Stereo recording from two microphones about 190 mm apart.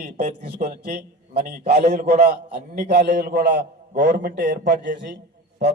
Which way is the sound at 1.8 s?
40° right (ahead or behind).